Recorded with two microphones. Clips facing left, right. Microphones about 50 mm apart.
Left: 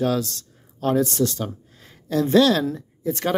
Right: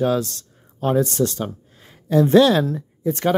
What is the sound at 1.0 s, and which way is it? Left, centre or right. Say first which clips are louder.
Speech: right 1 dB; right.